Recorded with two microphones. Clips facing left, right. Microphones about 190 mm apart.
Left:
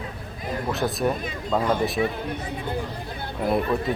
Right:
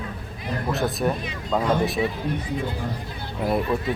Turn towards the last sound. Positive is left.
turn(degrees=0)  # may be behind; listen again after turning